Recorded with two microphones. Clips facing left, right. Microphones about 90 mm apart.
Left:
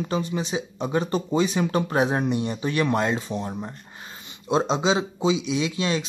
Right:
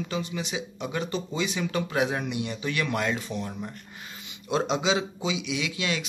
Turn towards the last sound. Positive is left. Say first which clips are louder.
# left 5 dB
turn(degrees=30)  # may be behind; listen again after turning